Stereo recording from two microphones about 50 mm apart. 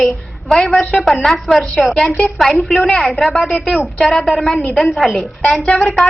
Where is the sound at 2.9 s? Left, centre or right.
Centre.